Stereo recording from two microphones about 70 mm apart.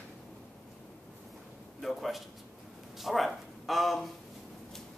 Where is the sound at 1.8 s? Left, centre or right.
Centre.